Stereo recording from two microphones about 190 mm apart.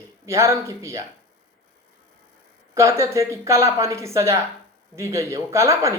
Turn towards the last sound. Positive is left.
turn(degrees=-15)  # may be behind; listen again after turning